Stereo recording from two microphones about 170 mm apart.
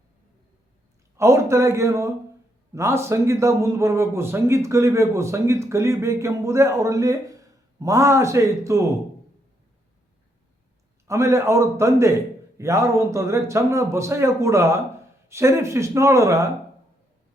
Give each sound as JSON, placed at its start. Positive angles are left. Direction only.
{"t": 1.1, "sound": "a man's voice", "side_deg": -15}
{"t": 11.1, "sound": "a man's voice", "side_deg": -15}